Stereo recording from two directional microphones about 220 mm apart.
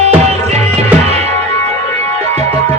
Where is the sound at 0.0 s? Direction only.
30° right (ahead or behind).